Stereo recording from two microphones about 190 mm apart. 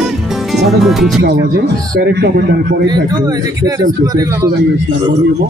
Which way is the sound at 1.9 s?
55° right (ahead or behind).